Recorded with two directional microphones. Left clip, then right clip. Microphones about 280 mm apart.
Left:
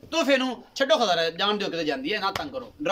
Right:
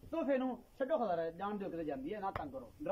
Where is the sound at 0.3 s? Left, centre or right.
Left.